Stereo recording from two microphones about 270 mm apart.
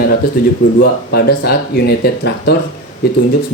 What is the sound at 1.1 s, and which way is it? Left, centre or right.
Speech, left.